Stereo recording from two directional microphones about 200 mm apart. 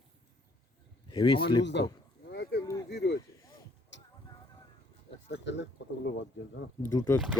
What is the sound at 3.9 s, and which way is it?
Vehicle, 65° left (ahead or behind).